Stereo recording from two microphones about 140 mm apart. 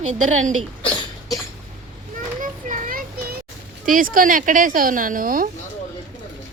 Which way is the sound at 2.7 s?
90° right.